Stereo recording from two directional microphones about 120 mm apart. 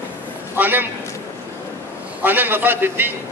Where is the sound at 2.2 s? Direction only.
15° right (ahead or behind).